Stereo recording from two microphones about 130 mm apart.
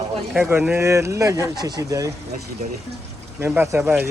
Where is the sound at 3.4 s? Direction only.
15° right (ahead or behind).